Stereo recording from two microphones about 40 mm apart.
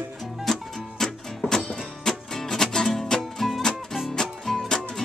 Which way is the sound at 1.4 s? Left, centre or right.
Left.